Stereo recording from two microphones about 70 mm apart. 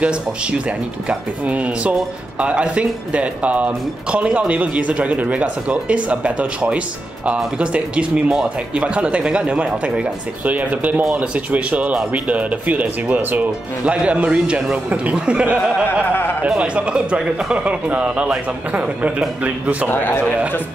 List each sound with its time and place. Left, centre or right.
0.0 s speech: centre
16.1 s speech: left
16.4 s speech: centre
19.9 s a man's voice: left